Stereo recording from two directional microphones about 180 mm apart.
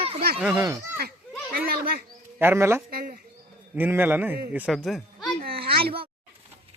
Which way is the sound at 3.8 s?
10° right (ahead or behind).